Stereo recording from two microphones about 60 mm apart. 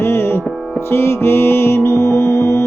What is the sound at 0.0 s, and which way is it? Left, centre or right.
Music, left.